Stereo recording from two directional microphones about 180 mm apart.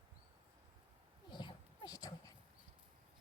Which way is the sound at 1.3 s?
25° left (ahead or behind).